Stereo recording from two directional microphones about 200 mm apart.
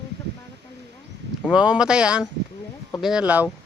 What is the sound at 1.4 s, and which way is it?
Speech, 5° right (ahead or behind).